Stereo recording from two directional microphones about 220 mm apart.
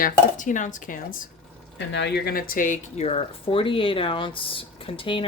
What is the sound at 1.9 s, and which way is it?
Speech, 50° left (ahead or behind).